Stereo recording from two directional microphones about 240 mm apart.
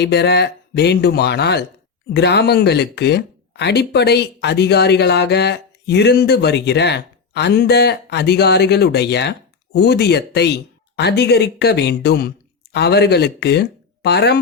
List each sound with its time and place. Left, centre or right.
0.0 s speech: left